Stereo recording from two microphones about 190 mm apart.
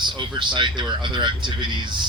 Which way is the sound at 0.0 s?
25° right (ahead or behind).